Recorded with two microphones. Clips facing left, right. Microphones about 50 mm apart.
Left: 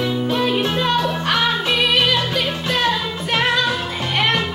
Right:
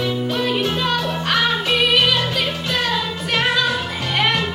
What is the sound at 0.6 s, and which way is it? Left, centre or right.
Music, left.